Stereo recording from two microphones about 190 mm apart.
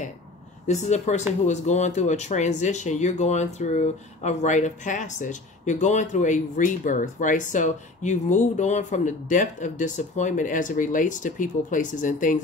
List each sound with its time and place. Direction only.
0.7 s speech: 35° left (ahead or behind)